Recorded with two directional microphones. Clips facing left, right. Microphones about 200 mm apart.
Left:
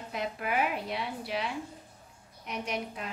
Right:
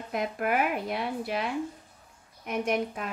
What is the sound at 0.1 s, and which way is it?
A woman's voice, 50° right (ahead or behind).